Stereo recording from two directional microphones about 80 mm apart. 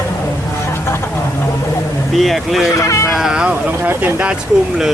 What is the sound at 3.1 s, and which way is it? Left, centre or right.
Speech, centre.